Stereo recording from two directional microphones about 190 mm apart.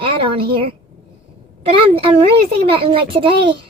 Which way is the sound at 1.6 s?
30° right (ahead or behind).